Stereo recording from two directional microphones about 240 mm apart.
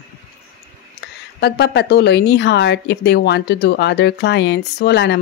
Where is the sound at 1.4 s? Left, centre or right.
Left.